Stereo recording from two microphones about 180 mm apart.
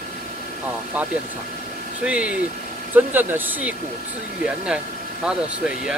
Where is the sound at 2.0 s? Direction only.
5° right (ahead or behind).